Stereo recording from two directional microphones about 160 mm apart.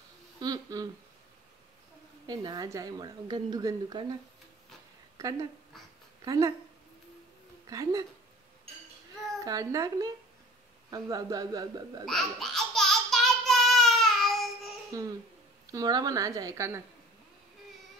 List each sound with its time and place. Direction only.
0.4 s a sound: 25° right (ahead or behind)
2.2 s a woman's voice: 25° right (ahead or behind)
7.6 s a woman's voice: 20° right (ahead or behind)
9.4 s a woman's voice: 20° right (ahead or behind)
12.0 s babbling: centre (ahead or behind)
14.9 s a woman's voice: 20° right (ahead or behind)